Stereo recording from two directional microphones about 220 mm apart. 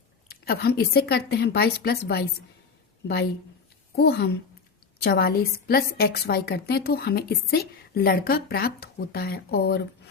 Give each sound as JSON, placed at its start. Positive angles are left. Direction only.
{"t": 0.3, "sound": "a woman's voice", "side_deg": 45}
{"t": 3.9, "sound": "a woman's voice", "side_deg": 45}